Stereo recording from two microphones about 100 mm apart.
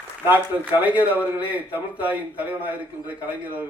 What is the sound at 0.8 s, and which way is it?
A man's voice, 15° right (ahead or behind).